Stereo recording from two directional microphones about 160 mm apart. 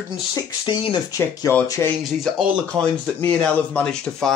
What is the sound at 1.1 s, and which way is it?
Speech, 20° left (ahead or behind).